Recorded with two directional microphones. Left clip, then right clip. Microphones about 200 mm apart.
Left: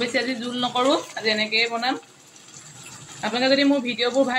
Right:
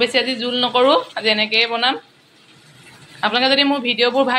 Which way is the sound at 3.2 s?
Centre (ahead or behind).